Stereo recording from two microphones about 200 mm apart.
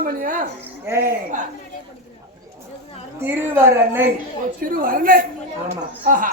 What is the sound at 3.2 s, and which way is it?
Speech, 10° right (ahead or behind).